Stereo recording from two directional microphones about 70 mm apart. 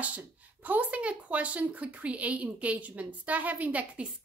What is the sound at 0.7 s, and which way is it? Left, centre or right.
Speech, right.